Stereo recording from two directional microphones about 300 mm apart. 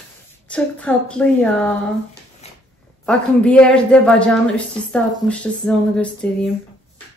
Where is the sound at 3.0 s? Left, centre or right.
Centre.